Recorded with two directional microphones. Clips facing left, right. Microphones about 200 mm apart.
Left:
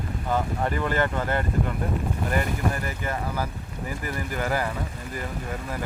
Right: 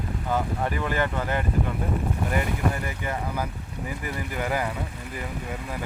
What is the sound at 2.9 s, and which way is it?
Speech, 15° right (ahead or behind).